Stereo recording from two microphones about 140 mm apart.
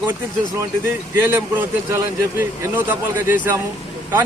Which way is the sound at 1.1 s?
15° right (ahead or behind).